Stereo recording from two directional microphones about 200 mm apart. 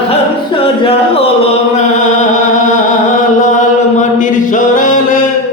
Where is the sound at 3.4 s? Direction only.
40° left (ahead or behind).